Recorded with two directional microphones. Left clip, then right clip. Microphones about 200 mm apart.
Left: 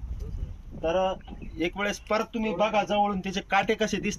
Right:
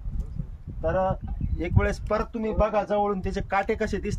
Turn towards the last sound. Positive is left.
turn(degrees=-20)  # may be behind; listen again after turning